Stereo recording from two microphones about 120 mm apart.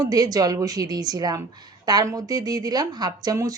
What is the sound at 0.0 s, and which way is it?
Speech, 30° right (ahead or behind).